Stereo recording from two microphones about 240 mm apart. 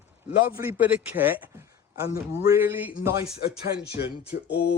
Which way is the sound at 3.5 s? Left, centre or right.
Left.